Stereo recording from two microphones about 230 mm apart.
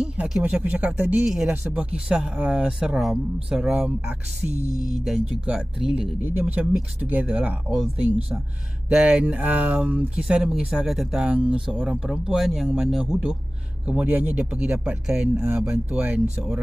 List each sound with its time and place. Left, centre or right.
0.0 s speech: centre
4.7 s music: centre
5.0 s speech: centre